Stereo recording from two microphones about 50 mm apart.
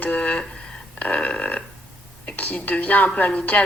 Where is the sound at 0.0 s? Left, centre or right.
Left.